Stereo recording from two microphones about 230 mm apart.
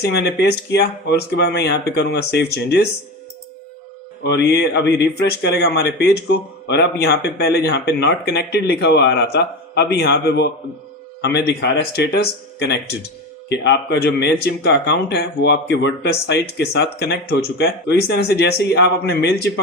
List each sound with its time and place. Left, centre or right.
0.0 s speech: left
4.2 s speech: left